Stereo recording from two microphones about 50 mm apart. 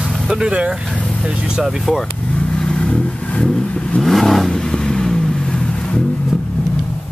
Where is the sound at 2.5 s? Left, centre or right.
Centre.